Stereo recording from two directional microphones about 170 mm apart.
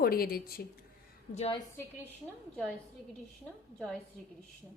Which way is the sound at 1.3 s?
35° left (ahead or behind).